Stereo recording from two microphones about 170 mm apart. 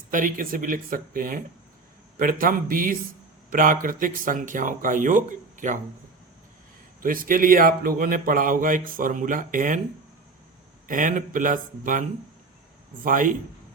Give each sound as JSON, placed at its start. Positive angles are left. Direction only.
{"t": 0.1, "sound": "a man's voice", "side_deg": -50}
{"t": 7.0, "sound": "a man's voice", "side_deg": -55}
{"t": 10.8, "sound": "speech", "side_deg": -50}